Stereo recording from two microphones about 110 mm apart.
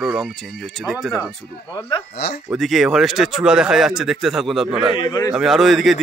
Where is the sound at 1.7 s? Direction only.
45° left (ahead or behind).